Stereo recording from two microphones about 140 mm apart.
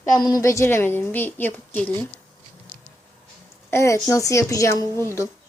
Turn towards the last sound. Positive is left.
turn(degrees=20)  # may be behind; listen again after turning